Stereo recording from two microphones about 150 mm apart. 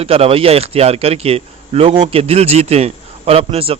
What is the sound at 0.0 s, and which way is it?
A man's voice, 40° right (ahead or behind).